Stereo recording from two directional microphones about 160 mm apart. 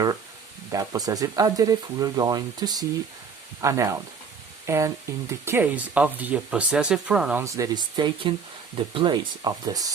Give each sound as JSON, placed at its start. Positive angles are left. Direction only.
{"t": 0.7, "sound": "speech", "side_deg": -20}
{"t": 7.4, "sound": "speech", "side_deg": -20}